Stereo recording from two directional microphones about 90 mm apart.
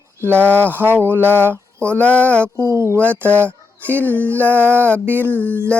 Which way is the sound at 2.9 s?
15° left (ahead or behind).